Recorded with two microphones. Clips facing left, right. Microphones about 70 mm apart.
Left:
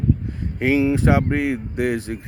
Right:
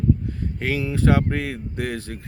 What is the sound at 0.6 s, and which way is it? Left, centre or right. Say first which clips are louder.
Speech: left 7 dB; centre.